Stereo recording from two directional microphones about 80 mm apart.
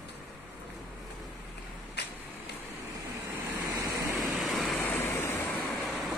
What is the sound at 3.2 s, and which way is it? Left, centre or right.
Vehicle, right.